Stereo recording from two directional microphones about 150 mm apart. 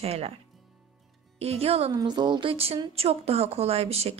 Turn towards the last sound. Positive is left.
turn(degrees=-45)  # may be behind; listen again after turning